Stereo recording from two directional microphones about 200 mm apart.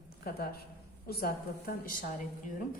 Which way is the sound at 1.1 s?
50° left (ahead or behind).